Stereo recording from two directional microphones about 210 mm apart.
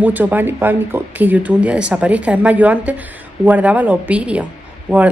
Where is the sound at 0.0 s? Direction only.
10° right (ahead or behind).